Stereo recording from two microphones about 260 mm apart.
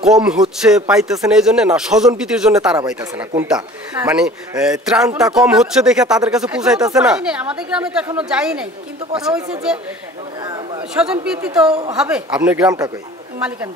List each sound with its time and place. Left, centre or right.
0.0 s speech: centre
11.0 s speech: centre
11.7 s a woman's voice: right
12.0 s speech: centre